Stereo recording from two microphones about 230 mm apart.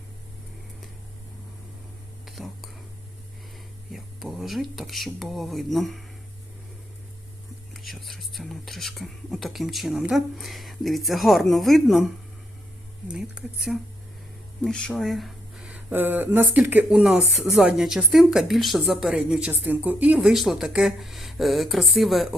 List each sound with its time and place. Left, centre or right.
2.2 s whispering: centre
3.9 s speech: centre
7.7 s speech: centre